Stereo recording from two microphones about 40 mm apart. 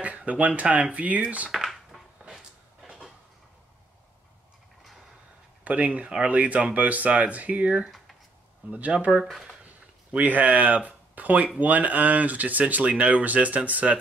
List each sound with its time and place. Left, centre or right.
0.0 s a sound: right
0.6 s speech: right
1.5 s speech: centre
5.6 s speech: right
6.0 s speech: right
6.3 s speech: right
8.9 s speech: right
10.1 s speech: right
12.8 s speech: right